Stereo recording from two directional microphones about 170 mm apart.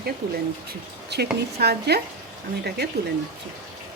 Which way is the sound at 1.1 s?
75° right (ahead or behind).